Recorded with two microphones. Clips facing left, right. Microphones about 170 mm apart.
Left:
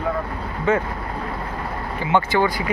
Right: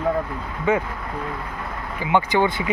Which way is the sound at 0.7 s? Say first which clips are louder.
Left 1 dB; 10° right (ahead or behind).